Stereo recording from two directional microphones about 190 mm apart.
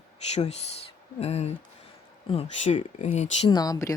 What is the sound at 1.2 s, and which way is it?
Speech, 35° left (ahead or behind).